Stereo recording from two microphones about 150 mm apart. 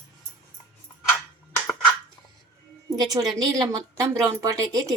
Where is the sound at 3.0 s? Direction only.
25° right (ahead or behind).